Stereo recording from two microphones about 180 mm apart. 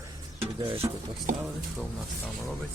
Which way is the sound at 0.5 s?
30° right (ahead or behind).